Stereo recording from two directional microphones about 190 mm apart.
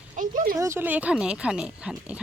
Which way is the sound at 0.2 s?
45° right (ahead or behind).